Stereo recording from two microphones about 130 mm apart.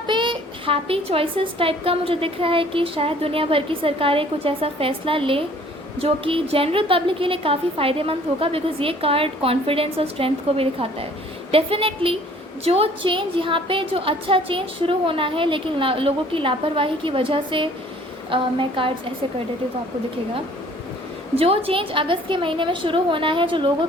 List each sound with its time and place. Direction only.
0.1 s a woman's voice: 40° right (ahead or behind)
21.3 s a woman's voice: 50° right (ahead or behind)